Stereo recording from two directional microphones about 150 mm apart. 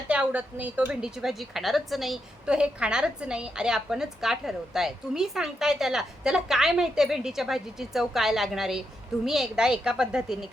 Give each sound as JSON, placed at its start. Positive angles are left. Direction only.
{"t": 0.1, "sound": "a woman's voice", "side_deg": -10}